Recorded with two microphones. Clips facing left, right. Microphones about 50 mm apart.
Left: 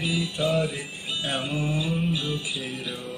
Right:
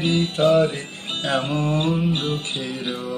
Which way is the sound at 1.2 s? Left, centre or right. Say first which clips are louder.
Right 7 dB; right.